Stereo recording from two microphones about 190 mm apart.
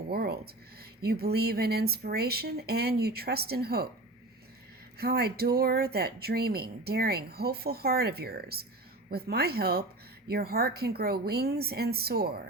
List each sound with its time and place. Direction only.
0.1 s speech: 55° right (ahead or behind)
4.9 s speech: 55° right (ahead or behind)